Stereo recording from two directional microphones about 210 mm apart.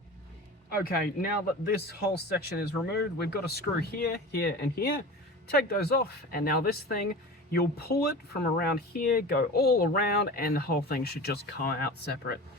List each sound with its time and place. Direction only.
0.8 s speech: 45° left (ahead or behind)